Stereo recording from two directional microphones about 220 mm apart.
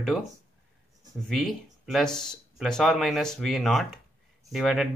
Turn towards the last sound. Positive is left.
turn(degrees=0)  # may be behind; listen again after turning